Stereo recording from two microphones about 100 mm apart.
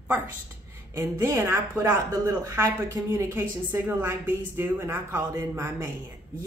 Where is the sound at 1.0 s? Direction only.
30° right (ahead or behind).